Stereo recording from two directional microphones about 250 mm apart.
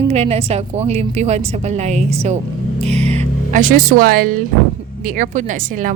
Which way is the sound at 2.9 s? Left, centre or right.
Right.